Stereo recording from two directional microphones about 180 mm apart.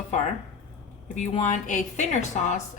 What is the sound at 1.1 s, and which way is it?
Speech, 40° left (ahead or behind).